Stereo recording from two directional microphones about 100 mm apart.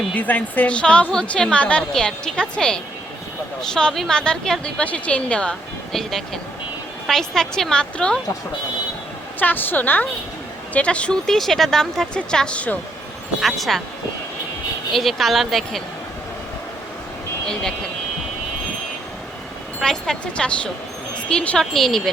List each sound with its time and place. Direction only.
0.1 s a woman's voice: 15° left (ahead or behind)
9.4 s a woman's voice: 20° left (ahead or behind)
13.4 s a woman's voice: centre (ahead or behind)
14.9 s a woman's voice: centre (ahead or behind)
17.4 s speech: 5° left (ahead or behind)
19.8 s a woman's voice: 5° left (ahead or behind)